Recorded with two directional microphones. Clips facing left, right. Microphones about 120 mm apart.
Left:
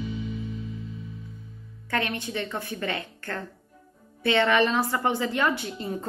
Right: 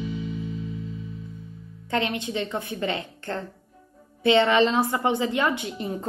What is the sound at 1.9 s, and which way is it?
A woman's voice, 20° right (ahead or behind).